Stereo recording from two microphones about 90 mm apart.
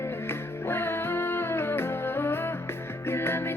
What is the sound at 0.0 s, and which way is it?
Music, 25° left (ahead or behind).